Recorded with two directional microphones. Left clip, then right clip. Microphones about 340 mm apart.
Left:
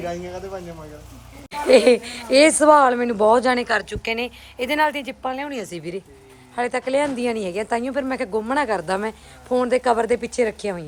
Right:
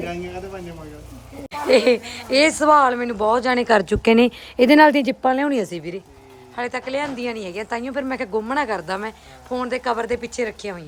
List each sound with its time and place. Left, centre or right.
1.6 s speech: centre
3.7 s speech: right
5.7 s speech: centre